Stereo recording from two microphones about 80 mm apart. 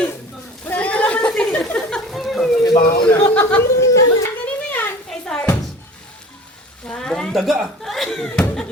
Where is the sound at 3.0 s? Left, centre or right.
Left.